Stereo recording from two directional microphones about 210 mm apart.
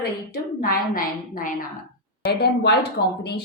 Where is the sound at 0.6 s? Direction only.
45° left (ahead or behind).